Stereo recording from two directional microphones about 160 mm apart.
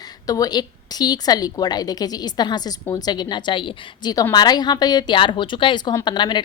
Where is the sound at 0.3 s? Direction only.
25° left (ahead or behind).